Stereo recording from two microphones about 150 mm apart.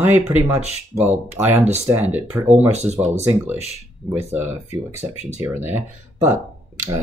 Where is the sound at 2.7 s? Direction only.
45° right (ahead or behind).